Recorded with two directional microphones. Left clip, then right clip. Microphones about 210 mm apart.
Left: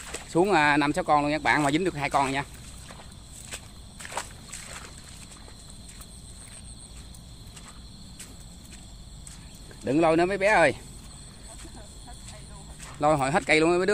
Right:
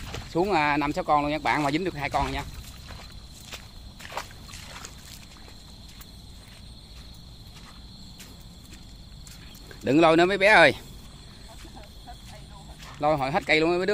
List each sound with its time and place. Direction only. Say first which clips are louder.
0.0 s speech: left 2 dB; 15° left (ahead or behind)
3.4 s walk: even; 10° left (ahead or behind)
9.8 s speech: right 3 dB; 25° right (ahead or behind)
13.0 s speech: left 1 dB; 15° left (ahead or behind)